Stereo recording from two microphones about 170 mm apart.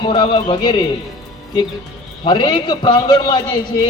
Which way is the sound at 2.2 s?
30° left (ahead or behind).